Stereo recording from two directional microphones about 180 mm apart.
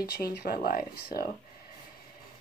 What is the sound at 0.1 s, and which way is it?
Speech, 60° left (ahead or behind).